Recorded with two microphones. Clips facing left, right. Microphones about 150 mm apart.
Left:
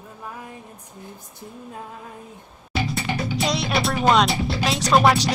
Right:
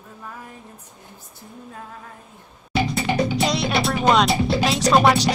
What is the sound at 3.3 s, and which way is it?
Speech, centre (ahead or behind).